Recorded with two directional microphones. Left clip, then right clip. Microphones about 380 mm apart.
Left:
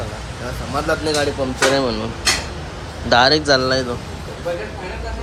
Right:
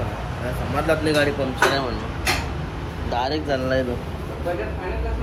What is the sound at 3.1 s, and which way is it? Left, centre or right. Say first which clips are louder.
Speech: left 10 dB; centre.